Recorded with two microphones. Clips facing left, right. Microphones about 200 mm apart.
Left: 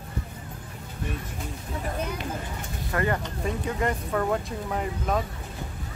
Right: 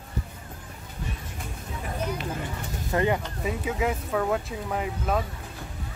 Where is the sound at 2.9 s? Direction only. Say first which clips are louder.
Right 2 dB; 20° right (ahead or behind).